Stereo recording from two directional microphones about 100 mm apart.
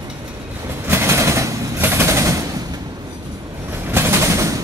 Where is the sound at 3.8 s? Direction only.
25° right (ahead or behind).